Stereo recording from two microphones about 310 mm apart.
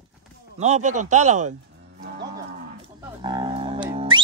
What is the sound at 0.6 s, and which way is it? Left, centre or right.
Speech, right.